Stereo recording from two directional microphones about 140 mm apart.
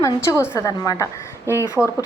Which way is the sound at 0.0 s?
20° left (ahead or behind).